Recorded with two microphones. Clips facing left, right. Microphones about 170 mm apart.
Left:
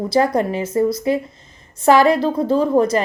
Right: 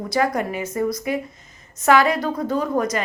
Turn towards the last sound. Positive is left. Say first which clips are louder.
# left 6 dB
turn(degrees=30)  # may be behind; listen again after turning